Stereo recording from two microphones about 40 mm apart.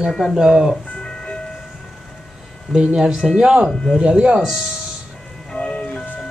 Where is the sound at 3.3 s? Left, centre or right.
Centre.